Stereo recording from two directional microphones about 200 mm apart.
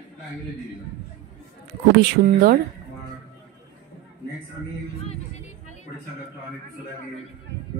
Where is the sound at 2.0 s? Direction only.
50° right (ahead or behind).